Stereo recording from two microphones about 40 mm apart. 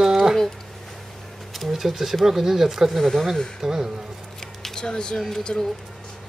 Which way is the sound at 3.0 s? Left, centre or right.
Centre.